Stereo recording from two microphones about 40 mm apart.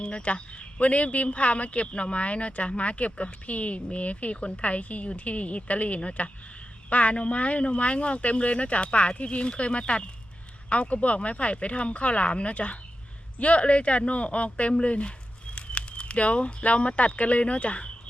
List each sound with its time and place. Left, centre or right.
0.0 s speech: left